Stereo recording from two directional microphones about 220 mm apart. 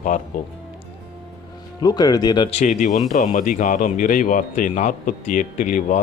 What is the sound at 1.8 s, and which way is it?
Speech, 15° left (ahead or behind).